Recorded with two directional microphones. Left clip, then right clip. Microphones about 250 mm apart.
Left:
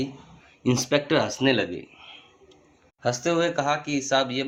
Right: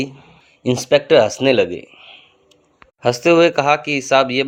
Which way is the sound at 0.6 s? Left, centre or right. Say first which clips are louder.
Right 8 dB; right.